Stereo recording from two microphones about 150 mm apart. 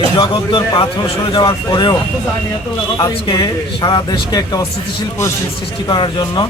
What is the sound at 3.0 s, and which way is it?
A man's voice, 30° left (ahead or behind).